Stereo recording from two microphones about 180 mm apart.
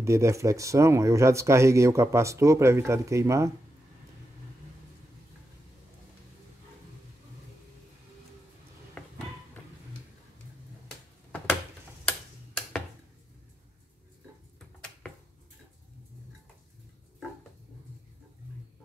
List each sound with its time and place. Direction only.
0.0 s speech: 15° right (ahead or behind)
9.0 s a sound: 5° left (ahead or behind)
12.1 s tick-tock: 5° left (ahead or behind)